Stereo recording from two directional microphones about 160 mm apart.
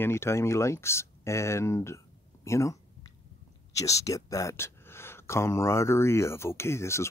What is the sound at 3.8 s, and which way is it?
Speech, 20° left (ahead or behind).